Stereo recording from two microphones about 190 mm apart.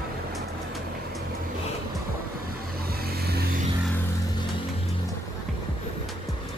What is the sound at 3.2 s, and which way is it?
Music, 55° right (ahead or behind).